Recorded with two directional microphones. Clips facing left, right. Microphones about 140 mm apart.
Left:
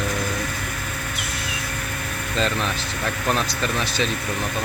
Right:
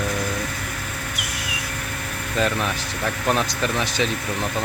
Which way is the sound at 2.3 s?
15° right (ahead or behind).